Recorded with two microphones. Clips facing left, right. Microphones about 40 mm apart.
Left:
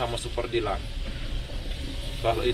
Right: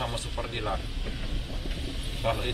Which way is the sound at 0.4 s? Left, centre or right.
Centre.